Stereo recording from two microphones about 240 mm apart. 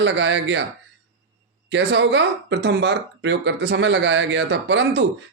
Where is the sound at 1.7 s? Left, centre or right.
Right.